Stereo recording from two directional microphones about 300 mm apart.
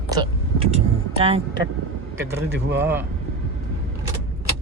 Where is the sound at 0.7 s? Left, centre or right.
Centre.